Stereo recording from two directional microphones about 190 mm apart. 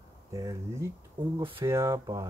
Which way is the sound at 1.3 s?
25° right (ahead or behind).